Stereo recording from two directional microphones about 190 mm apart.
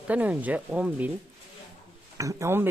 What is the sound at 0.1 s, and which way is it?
Speech, 10° right (ahead or behind).